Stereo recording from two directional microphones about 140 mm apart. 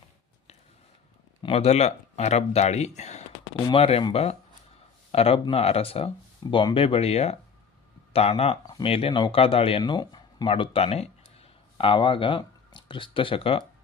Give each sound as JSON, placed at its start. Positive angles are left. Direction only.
{"t": 1.4, "sound": "speech", "side_deg": 45}
{"t": 10.5, "sound": "speech", "side_deg": 40}